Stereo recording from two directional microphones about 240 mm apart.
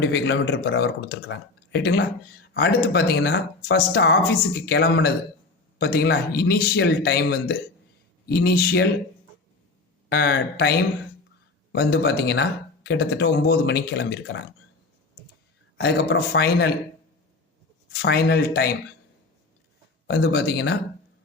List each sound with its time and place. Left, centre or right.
0.0 s speech: left
10.1 s speech: left
15.8 s speech: left
17.8 s speech: left
20.1 s speech: left